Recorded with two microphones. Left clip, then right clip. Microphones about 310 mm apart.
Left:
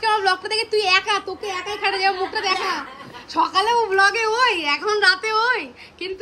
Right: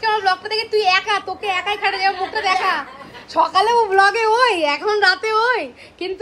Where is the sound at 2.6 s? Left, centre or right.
Centre.